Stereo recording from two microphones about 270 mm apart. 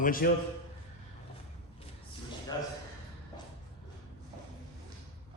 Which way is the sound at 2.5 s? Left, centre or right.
Centre.